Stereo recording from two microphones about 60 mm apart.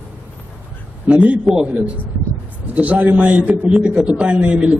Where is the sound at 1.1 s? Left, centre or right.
Right.